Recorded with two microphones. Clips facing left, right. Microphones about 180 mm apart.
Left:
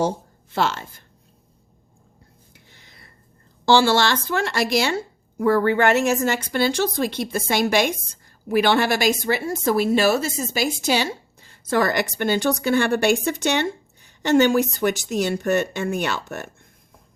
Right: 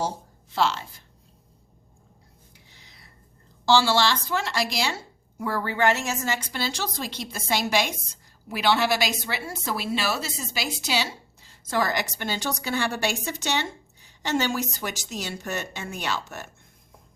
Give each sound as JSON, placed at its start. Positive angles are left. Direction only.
{"t": 0.5, "sound": "speech", "side_deg": 55}
{"t": 2.5, "sound": "music", "side_deg": 55}
{"t": 3.7, "sound": "speech", "side_deg": 55}